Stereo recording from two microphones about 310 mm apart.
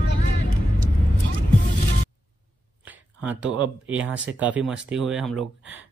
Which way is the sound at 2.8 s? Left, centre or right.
Centre.